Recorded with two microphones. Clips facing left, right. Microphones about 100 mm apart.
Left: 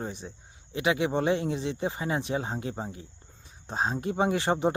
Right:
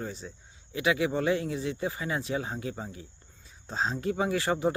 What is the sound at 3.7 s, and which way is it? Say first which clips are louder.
Speech: left 1 dB; 20° left (ahead or behind).